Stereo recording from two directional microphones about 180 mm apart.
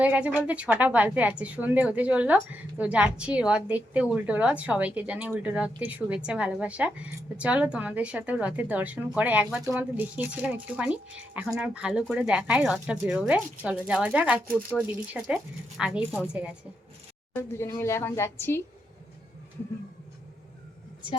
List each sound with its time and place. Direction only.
0.0 s a woman's voice: 10° right (ahead or behind)
17.3 s a woman's voice: 15° left (ahead or behind)